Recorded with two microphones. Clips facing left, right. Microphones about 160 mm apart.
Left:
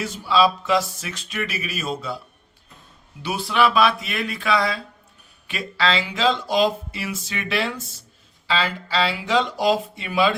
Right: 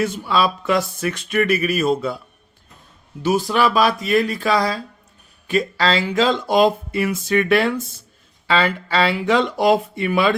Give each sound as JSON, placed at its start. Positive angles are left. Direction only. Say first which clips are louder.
{"t": 0.0, "sound": "speech", "louder": "even", "side_deg": -55}
{"t": 3.2, "sound": "speech", "louder": "right 3 dB", "side_deg": -45}